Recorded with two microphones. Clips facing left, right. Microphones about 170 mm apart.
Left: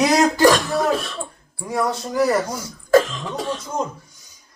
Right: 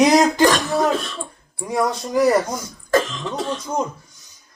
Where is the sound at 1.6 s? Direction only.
20° right (ahead or behind).